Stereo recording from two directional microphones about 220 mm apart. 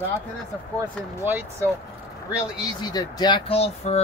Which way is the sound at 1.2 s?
10° right (ahead or behind).